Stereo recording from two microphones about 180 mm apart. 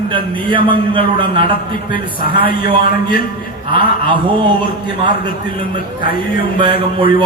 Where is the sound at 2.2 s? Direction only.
55° left (ahead or behind).